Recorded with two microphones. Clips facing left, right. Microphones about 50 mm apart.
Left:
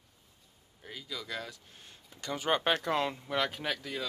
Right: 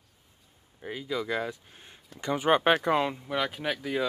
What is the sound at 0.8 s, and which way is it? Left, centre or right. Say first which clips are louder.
Speech: right 10 dB; right.